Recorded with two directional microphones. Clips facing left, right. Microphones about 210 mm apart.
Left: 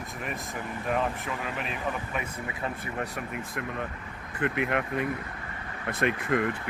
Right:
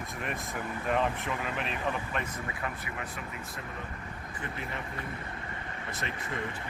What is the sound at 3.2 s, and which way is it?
Speech, 55° left (ahead or behind).